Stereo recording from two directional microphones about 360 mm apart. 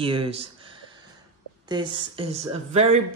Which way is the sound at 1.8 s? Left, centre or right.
Centre.